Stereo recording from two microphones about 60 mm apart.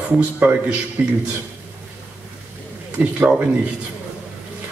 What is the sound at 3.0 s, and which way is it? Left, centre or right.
Speech, right.